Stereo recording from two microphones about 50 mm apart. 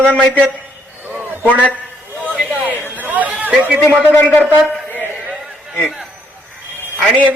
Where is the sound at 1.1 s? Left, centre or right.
Right.